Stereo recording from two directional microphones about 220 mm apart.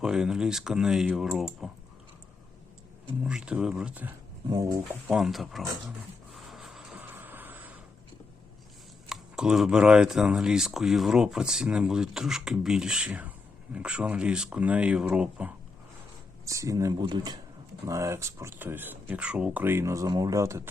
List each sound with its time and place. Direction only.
0.0 s speech: 5° right (ahead or behind)
3.2 s speech: 5° right (ahead or behind)
4.4 s speech: 15° right (ahead or behind)
5.0 s speech: centre (ahead or behind)
6.3 s vehicle: centre (ahead or behind)
9.0 s speech: centre (ahead or behind)